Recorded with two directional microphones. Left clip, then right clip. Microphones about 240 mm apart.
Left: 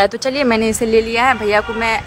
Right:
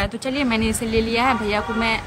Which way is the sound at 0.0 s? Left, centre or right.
Centre.